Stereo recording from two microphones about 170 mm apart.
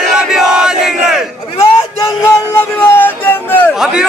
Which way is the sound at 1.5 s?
15° left (ahead or behind).